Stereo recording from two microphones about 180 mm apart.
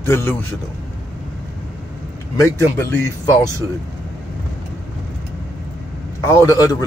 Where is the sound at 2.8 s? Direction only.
10° left (ahead or behind).